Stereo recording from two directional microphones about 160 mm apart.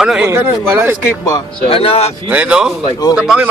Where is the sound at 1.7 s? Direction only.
35° left (ahead or behind).